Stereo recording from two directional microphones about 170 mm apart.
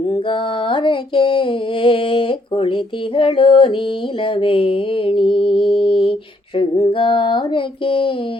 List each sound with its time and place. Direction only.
0.1 s mantra: 30° left (ahead or behind)